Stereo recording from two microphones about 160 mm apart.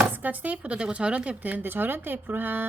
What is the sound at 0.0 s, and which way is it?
Speech, 10° right (ahead or behind).